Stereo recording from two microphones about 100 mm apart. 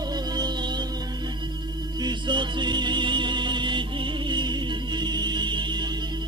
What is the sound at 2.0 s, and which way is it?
Music, 50° right (ahead or behind).